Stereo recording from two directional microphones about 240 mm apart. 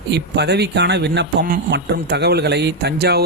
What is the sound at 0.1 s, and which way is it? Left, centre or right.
A man's voice, right.